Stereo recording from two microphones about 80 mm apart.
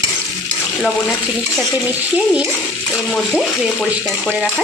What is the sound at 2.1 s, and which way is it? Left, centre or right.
Speech, centre.